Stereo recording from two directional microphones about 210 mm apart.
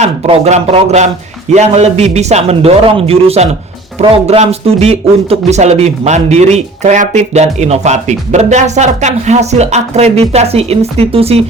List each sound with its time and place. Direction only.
0.0 s speech: 30° right (ahead or behind)